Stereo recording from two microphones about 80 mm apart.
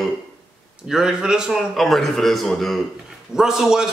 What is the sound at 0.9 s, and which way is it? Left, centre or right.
Speech, centre.